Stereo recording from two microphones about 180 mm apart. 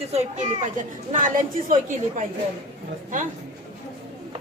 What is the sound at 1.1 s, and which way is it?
Speech, 45° right (ahead or behind).